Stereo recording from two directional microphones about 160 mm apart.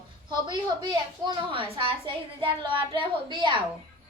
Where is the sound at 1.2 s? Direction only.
30° right (ahead or behind).